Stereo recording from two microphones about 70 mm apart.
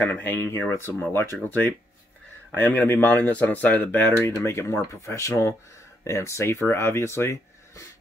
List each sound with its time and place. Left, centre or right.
0.0 s speech: left
4.4 s speech: left